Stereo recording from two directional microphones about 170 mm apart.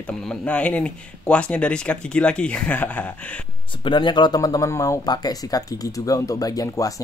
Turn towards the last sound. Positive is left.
turn(degrees=20)  # may be behind; listen again after turning